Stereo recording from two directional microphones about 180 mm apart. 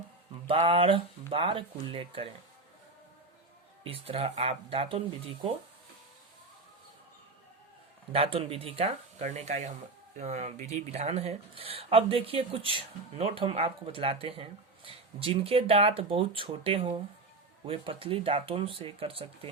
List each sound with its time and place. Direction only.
0.4 s speech: 30° right (ahead or behind)
3.8 s speech: 30° right (ahead or behind)
8.1 s speech: 30° right (ahead or behind)